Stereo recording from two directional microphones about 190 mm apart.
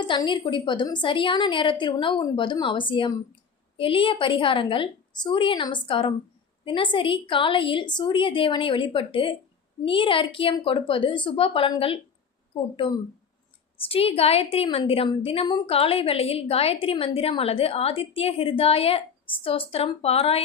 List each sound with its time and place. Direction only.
0.0 s a woman's voice: 25° left (ahead or behind)
13.8 s a woman's voice: 30° left (ahead or behind)